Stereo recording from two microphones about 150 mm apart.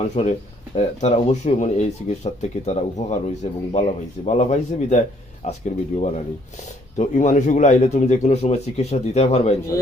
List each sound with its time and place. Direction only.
0.2 s speech: 45° left (ahead or behind)